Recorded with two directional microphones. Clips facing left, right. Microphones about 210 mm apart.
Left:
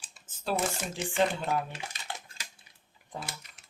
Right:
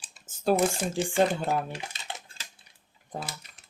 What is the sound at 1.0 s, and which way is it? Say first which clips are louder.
Speech: right 3 dB; 30° right (ahead or behind).